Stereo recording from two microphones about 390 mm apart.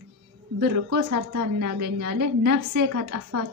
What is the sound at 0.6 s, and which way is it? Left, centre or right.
A woman's voice, right.